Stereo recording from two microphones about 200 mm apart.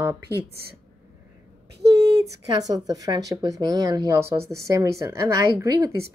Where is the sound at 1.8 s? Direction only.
55° right (ahead or behind).